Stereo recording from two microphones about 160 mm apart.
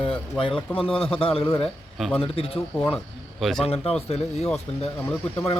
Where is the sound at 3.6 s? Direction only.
40° left (ahead or behind).